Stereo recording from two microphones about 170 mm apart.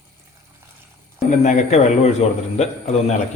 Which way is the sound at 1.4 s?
45° left (ahead or behind).